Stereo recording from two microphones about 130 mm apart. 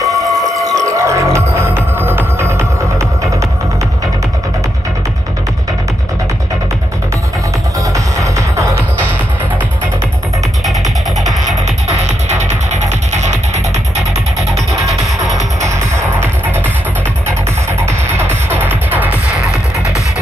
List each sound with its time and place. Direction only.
0.3 s music: 25° right (ahead or behind)
7.9 s music: 25° right (ahead or behind)
11.9 s music: 60° right (ahead or behind)
17.8 s music: 20° right (ahead or behind)